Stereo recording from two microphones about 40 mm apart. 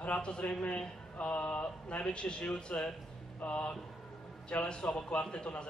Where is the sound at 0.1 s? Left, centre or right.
Left.